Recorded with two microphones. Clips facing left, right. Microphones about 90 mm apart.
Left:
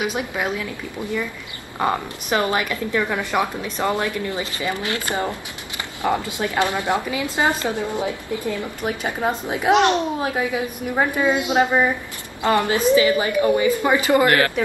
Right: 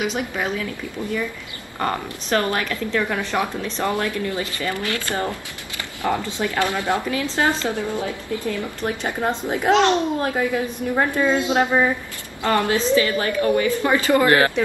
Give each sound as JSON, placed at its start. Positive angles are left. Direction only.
{"t": 0.0, "sound": "a woman's voice", "side_deg": 10}
{"t": 1.8, "sound": "a woman's voice", "side_deg": 10}
{"t": 10.1, "sound": "a woman's voice", "side_deg": 5}
{"t": 14.2, "sound": "speech", "side_deg": -25}